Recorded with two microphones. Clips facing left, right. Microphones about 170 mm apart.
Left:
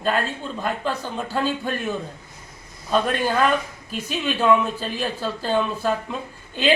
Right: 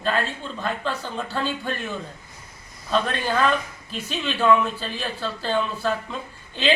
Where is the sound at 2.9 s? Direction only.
10° left (ahead or behind).